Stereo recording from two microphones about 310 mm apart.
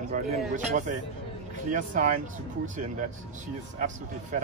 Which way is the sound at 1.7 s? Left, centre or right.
Right.